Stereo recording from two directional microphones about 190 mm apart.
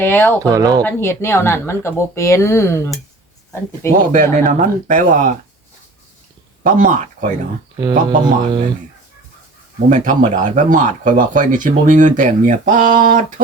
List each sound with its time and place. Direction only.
0.0 s speech: 10° left (ahead or behind)
0.5 s speech: 20° right (ahead or behind)
0.8 s speech: 10° left (ahead or behind)
4.1 s speech: 45° right (ahead or behind)
6.6 s speech: 45° right (ahead or behind)
7.8 s speech: 20° right (ahead or behind)
9.9 s speech: 40° right (ahead or behind)